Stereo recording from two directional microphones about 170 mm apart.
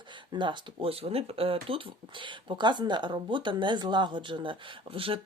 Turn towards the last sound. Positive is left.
turn(degrees=-30)  # may be behind; listen again after turning